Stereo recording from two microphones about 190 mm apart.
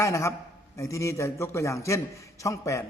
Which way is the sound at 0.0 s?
15° left (ahead or behind).